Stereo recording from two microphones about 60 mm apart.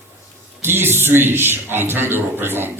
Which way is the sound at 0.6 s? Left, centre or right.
Right.